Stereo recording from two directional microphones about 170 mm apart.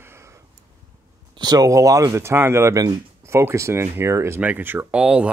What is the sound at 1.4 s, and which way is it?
Speech, 20° right (ahead or behind).